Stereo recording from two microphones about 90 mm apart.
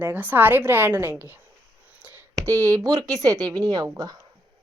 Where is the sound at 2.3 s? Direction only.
35° right (ahead or behind).